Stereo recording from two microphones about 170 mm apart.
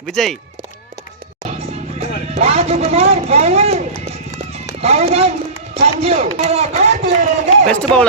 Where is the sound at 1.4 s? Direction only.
40° right (ahead or behind).